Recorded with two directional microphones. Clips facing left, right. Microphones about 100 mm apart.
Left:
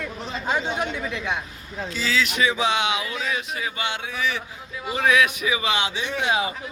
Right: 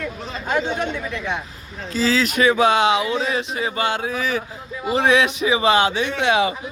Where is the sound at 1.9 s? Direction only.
35° right (ahead or behind); by 6.6 s 80° right.